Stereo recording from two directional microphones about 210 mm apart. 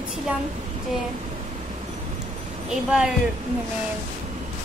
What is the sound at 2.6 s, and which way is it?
Speech, 5° right (ahead or behind).